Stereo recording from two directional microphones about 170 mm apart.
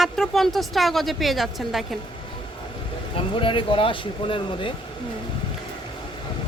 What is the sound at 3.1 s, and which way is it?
Speech, 30° left (ahead or behind).